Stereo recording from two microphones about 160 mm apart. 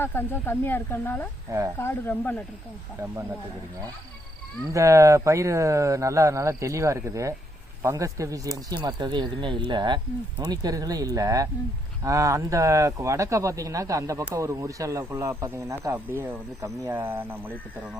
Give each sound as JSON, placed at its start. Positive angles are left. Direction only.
{"t": 0.0, "sound": "speech", "side_deg": 15}
{"t": 1.5, "sound": "speech", "side_deg": -20}
{"t": 1.8, "sound": "speech", "side_deg": 15}
{"t": 4.7, "sound": "speech", "side_deg": -20}